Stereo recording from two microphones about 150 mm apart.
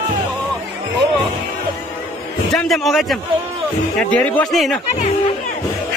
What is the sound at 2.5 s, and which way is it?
A man's voice, centre (ahead or behind).